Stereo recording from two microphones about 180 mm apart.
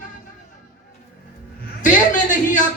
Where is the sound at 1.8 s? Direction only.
45° left (ahead or behind).